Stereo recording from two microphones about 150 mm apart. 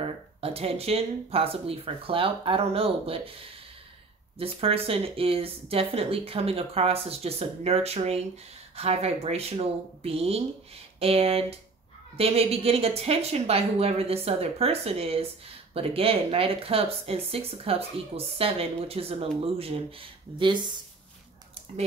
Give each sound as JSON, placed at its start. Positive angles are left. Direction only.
{"t": 0.0, "sound": "speech", "side_deg": -40}
{"t": 4.4, "sound": "speech", "side_deg": -40}